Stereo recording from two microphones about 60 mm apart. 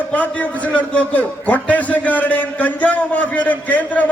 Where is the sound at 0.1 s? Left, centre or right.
Left.